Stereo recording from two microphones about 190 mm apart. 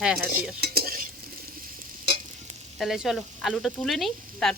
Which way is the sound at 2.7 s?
Centre (ahead or behind).